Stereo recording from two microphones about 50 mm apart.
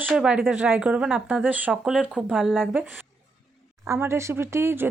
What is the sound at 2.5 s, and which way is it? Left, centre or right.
Speech, right.